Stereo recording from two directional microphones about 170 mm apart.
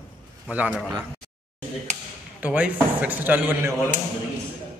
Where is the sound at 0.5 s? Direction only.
10° right (ahead or behind).